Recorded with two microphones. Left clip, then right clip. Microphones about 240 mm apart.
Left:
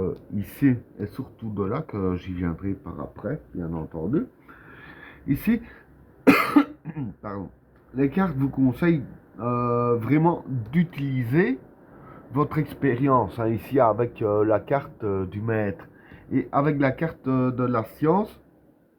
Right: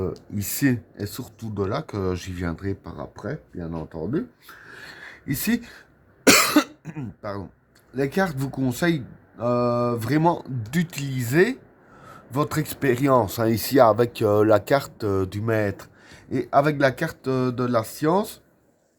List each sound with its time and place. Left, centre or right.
0.3 s speech: right
4.7 s a sound: right
6.2 s cough: right
7.9 s speech: right